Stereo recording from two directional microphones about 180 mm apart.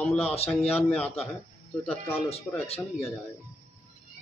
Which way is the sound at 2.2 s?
35° left (ahead or behind).